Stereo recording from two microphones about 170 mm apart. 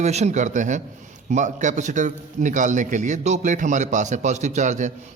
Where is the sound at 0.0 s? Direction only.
40° right (ahead or behind).